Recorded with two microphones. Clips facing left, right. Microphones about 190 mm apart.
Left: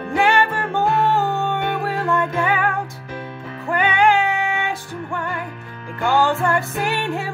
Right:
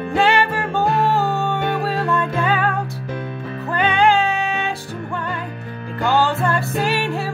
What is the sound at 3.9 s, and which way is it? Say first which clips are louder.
Music: right 1 dB; 15° left (ahead or behind).